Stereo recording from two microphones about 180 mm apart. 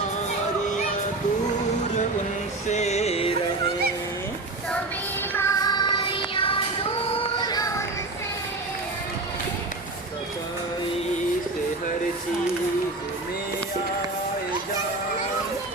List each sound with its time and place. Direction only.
2.6 s music: 40° left (ahead or behind)
5.3 s music: 15° left (ahead or behind)